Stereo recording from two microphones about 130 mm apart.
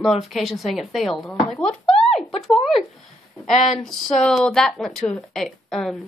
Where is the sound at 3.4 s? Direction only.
Centre (ahead or behind).